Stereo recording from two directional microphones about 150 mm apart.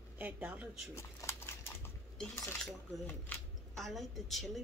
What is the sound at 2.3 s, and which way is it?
A woman's voice, 15° left (ahead or behind).